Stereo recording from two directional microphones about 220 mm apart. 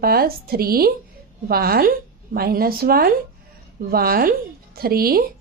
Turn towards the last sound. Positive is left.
turn(degrees=-40)  # may be behind; listen again after turning